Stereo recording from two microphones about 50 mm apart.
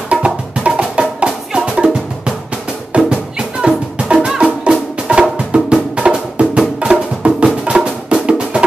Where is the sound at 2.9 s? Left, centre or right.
Centre.